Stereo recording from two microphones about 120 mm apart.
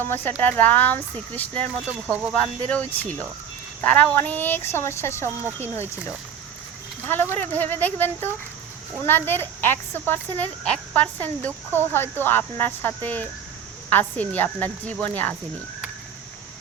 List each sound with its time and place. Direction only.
0.0 s speech: 15° left (ahead or behind)
7.1 s speech: 15° left (ahead or behind)